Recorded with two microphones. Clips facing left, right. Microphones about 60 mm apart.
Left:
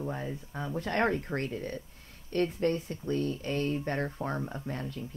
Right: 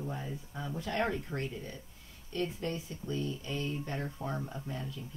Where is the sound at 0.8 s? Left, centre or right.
Left.